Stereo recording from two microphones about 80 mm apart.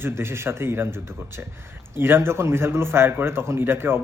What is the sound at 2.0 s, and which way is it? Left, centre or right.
A man's voice, right.